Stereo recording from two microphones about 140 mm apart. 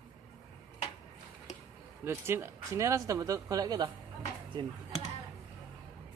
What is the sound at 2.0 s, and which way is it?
Speech, 15° right (ahead or behind).